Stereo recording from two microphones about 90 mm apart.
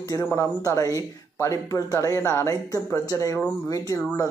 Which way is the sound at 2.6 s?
40° left (ahead or behind).